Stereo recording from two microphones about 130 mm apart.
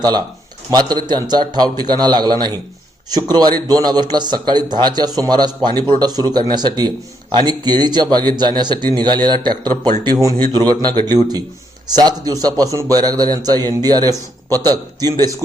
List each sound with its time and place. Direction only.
0.0 s a man's voice: 30° right (ahead or behind)